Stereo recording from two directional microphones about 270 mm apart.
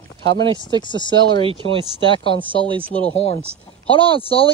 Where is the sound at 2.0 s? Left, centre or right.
Centre.